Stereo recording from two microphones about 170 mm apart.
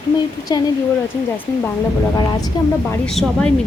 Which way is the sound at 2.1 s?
25° left (ahead or behind).